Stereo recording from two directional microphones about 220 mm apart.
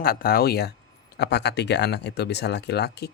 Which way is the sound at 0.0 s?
40° left (ahead or behind).